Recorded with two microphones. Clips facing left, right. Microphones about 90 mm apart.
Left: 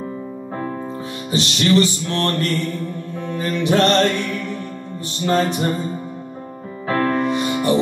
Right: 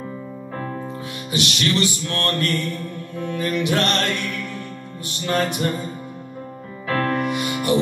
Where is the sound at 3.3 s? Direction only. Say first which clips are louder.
Left 2 dB; 30° left (ahead or behind).